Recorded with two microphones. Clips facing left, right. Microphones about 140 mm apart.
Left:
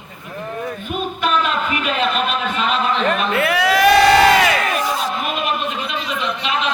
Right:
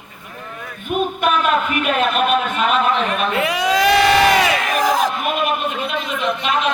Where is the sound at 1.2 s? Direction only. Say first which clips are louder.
Even; 50° right (ahead or behind).